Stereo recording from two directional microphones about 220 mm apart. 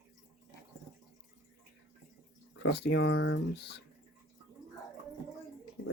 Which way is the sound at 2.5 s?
55° left (ahead or behind).